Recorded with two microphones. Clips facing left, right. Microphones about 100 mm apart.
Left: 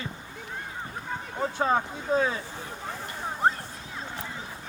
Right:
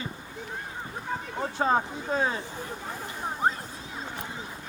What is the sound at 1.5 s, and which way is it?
Speech, 30° right (ahead or behind).